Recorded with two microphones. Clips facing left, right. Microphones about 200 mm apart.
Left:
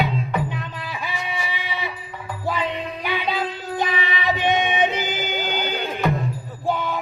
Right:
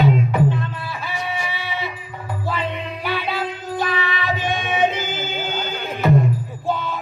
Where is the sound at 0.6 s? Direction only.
15° left (ahead or behind).